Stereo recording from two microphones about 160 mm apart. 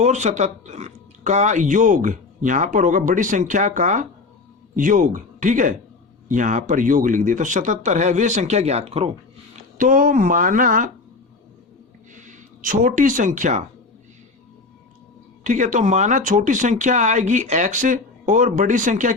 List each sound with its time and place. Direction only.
0.0 s speech: 45° right (ahead or behind)
9.7 s speech: 60° right (ahead or behind)
12.1 s speech: 50° right (ahead or behind)
15.4 s speech: 50° right (ahead or behind)